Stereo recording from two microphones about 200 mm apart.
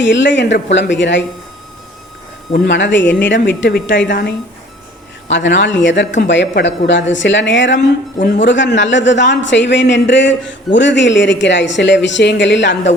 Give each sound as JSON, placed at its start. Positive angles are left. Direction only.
{"t": 0.0, "sound": "a man's voice", "side_deg": 65}
{"t": 2.5, "sound": "a man's voice", "side_deg": 65}
{"t": 5.3, "sound": "a man's voice", "side_deg": 65}